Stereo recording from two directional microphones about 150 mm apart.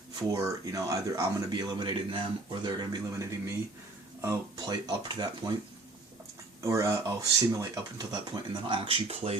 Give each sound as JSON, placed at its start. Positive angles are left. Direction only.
{"t": 0.2, "sound": "speech", "side_deg": -25}
{"t": 6.6, "sound": "speech", "side_deg": -20}